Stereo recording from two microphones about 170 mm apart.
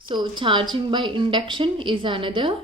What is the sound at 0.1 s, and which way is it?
A woman's voice, 25° right (ahead or behind).